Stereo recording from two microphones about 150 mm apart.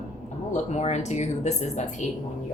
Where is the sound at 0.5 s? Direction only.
50° left (ahead or behind).